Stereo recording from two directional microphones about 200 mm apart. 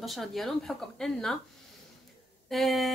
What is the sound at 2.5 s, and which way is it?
Speech, centre (ahead or behind).